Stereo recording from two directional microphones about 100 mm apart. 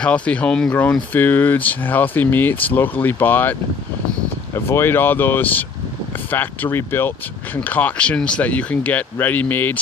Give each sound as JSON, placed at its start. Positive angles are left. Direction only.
{"t": 0.0, "sound": "speech", "side_deg": 10}